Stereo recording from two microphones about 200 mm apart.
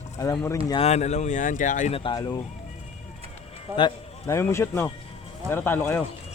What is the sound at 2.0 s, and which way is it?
Speech, 20° left (ahead or behind).